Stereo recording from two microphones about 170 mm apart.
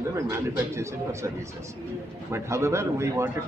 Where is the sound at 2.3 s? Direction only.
15° right (ahead or behind).